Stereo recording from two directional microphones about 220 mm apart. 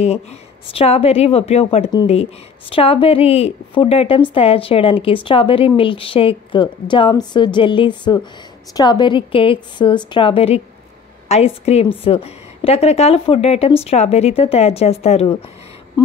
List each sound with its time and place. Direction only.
0.7 s speech: 25° left (ahead or behind)